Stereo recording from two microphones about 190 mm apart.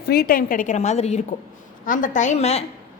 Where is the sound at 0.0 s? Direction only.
55° left (ahead or behind).